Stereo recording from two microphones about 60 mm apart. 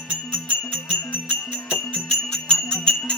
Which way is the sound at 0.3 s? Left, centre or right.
Centre.